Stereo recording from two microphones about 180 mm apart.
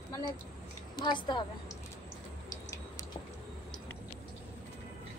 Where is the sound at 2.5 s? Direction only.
20° left (ahead or behind).